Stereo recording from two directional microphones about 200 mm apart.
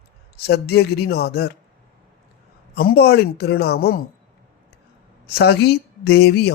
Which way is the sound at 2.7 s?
50° left (ahead or behind).